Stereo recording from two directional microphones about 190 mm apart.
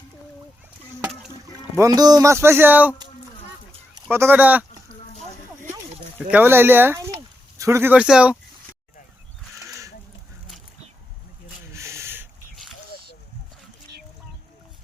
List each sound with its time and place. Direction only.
1.7 s speech: 15° right (ahead or behind)
4.1 s speech: 10° right (ahead or behind)
4.9 s a sound: 35° left (ahead or behind)
6.3 s speech: 10° right (ahead or behind)
9.6 s goose: 15° right (ahead or behind)
11.8 s a sound: 15° right (ahead or behind)